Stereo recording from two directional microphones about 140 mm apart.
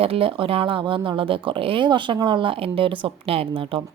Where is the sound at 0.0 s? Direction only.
40° right (ahead or behind).